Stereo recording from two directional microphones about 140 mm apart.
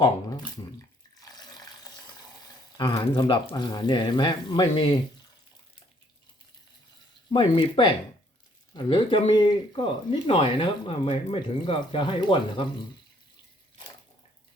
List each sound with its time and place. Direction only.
0.0 s speech: 30° left (ahead or behind)
1.2 s water: 30° left (ahead or behind)
2.7 s speech: 30° left (ahead or behind)
7.3 s speech: 35° left (ahead or behind)